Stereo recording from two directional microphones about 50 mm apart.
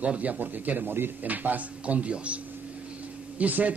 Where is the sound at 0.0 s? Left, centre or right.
Right.